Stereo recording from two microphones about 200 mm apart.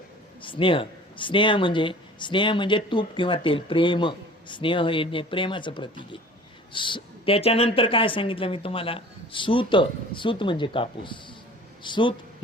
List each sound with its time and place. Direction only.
0.4 s speech: 25° left (ahead or behind)